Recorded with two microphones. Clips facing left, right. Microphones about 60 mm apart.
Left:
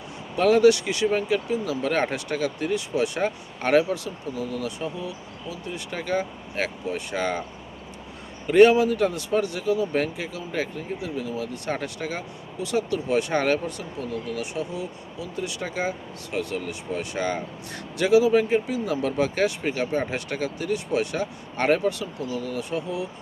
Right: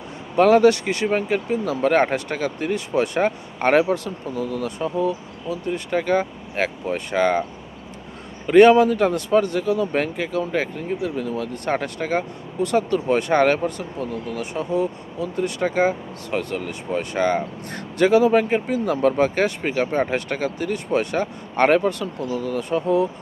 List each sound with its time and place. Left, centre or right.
0.3 s speech: right
8.4 s speech: right